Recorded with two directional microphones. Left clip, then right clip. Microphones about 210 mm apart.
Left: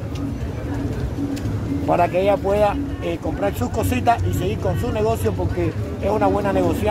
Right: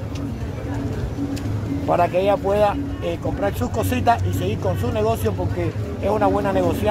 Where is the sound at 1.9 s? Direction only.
15° right (ahead or behind).